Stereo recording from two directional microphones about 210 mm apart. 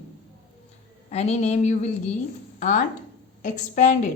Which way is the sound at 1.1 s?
30° left (ahead or behind).